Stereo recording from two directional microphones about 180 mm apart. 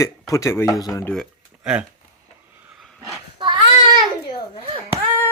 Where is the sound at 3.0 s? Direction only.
20° right (ahead or behind).